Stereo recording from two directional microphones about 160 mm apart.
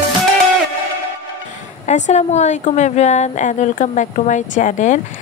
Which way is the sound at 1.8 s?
45° left (ahead or behind).